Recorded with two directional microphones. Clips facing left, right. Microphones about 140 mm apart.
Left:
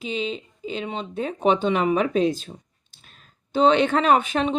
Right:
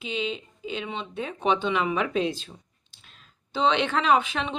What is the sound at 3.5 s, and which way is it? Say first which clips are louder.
Speech: left 6 dB; 45° left (ahead or behind).